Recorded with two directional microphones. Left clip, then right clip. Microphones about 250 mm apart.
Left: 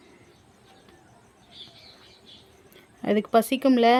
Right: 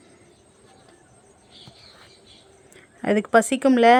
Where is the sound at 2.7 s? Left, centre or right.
Centre.